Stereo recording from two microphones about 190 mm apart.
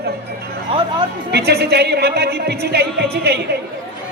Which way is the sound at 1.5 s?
55° right (ahead or behind).